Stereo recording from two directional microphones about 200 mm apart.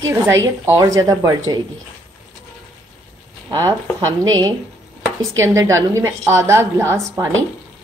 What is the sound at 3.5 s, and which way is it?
Speech, 15° right (ahead or behind).